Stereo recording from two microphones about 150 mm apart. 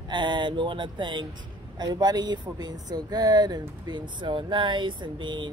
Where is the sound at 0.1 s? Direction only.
30° right (ahead or behind).